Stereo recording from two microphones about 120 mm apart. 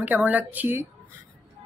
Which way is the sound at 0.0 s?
15° right (ahead or behind).